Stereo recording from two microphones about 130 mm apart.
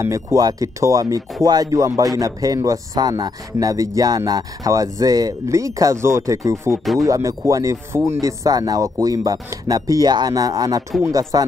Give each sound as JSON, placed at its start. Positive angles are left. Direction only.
{"t": 0.0, "sound": "speech", "side_deg": -25}
{"t": 6.8, "sound": "speech", "side_deg": 0}
{"t": 7.1, "sound": "speech", "side_deg": -25}